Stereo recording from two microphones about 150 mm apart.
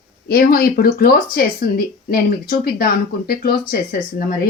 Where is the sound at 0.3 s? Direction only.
80° left.